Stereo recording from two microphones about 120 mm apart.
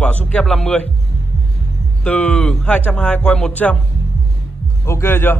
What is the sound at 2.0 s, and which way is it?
Speech, 10° left (ahead or behind).